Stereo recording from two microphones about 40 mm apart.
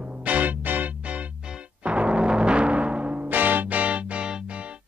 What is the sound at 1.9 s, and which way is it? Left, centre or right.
Timpani, right.